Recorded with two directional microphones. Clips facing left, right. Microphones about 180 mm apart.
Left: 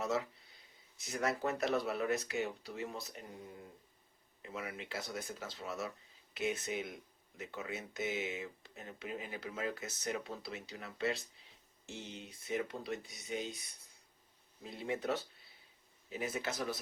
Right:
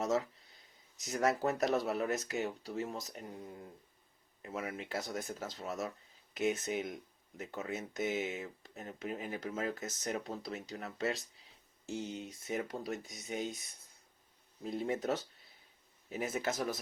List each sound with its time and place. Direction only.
0.0 s speech: 40° right (ahead or behind)
4.4 s speech: 40° right (ahead or behind)
14.6 s speech: 45° right (ahead or behind)